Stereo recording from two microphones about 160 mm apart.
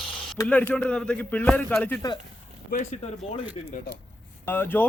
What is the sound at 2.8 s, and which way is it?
Speech, 45° left (ahead or behind).